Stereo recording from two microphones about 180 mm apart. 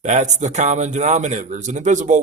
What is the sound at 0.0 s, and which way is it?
Speech, 40° right (ahead or behind).